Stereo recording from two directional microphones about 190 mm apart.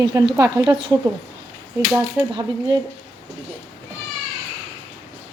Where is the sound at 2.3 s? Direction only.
25° right (ahead or behind).